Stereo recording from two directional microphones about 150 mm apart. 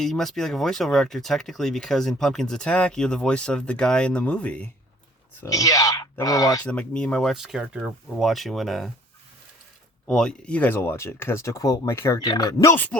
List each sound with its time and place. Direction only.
0.0 s speech: centre (ahead or behind)
5.4 s speech: 25° left (ahead or behind)
6.7 s speech: 5° left (ahead or behind)
10.1 s speech: 5° left (ahead or behind)